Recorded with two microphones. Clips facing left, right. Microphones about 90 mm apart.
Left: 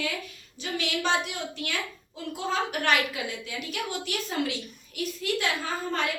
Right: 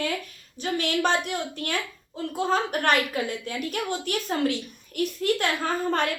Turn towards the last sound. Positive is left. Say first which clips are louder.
# right 5 dB
turn(degrees=-50)  # may be behind; listen again after turning